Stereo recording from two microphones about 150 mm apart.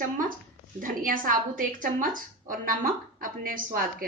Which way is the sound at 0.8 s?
65° right (ahead or behind).